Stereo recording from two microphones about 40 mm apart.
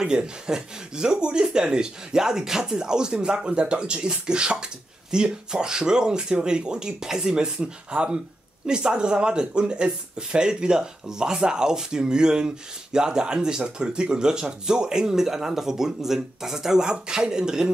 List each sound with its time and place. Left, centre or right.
0.0 s speech: centre